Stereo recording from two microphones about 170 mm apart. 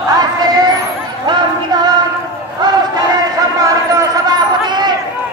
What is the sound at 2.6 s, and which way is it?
Battle cry, 25° right (ahead or behind).